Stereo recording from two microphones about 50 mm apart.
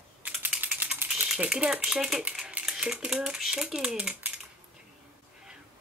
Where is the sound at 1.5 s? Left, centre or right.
Centre.